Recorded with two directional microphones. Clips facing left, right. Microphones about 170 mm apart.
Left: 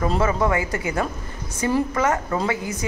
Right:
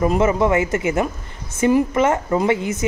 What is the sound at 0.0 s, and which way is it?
A woman's voice, 20° right (ahead or behind).